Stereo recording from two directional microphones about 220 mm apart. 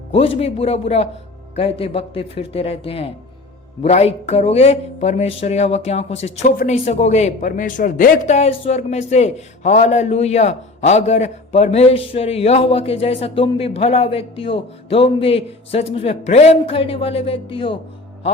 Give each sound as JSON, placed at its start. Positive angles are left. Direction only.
{"t": 0.1, "sound": "speech", "side_deg": 25}